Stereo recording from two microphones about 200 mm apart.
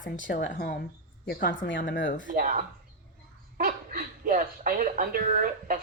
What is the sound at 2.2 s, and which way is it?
A man's voice, 40° right (ahead or behind).